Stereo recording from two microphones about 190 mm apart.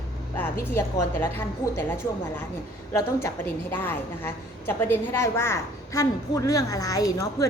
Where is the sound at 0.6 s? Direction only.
15° left (ahead or behind).